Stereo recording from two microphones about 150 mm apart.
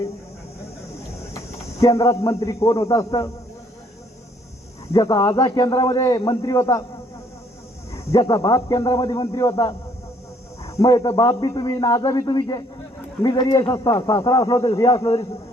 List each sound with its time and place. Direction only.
1.3 s a man's voice: 20° left (ahead or behind)
4.9 s a man's voice: 25° left (ahead or behind)
7.9 s a man's voice: 25° left (ahead or behind)